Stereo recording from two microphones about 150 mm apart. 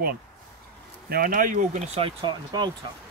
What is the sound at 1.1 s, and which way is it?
Speech, 75° right (ahead or behind).